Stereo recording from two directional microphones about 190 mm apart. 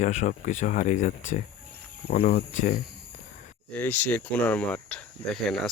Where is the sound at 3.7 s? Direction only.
10° left (ahead or behind).